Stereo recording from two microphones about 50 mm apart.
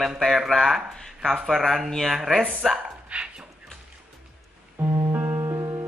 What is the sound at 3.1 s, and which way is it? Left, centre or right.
Speech, right.